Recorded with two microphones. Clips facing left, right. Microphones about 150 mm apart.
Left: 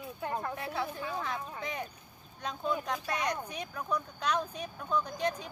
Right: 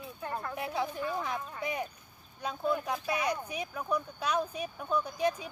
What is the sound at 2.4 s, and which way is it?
Speech, 10° right (ahead or behind).